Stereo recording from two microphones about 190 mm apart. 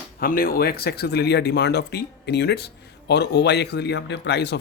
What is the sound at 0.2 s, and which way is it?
Speech, 50° left (ahead or behind).